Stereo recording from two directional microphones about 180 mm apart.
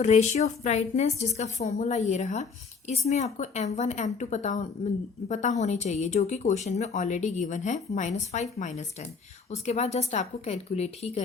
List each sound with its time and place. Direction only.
0.0 s a woman's voice: 40° left (ahead or behind)